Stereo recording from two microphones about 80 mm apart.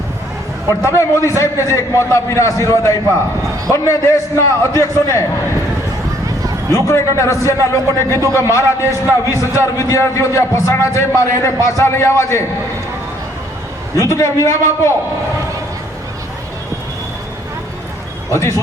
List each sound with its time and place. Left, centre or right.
0.7 s a man's voice: left
6.7 s a man's voice: left
13.9 s a man's voice: left
18.3 s speech: left